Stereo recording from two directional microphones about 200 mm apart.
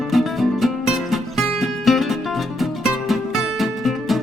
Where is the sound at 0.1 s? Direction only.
Centre (ahead or behind).